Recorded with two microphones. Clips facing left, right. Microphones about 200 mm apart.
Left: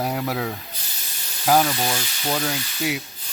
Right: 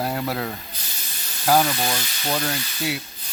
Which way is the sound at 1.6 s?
Centre (ahead or behind).